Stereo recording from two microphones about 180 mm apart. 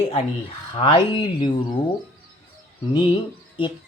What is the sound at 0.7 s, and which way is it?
Speech, 30° left (ahead or behind).